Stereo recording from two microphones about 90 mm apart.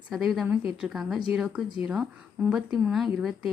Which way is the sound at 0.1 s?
Centre (ahead or behind).